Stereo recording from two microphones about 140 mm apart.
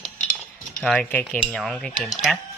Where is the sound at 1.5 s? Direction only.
5° left (ahead or behind).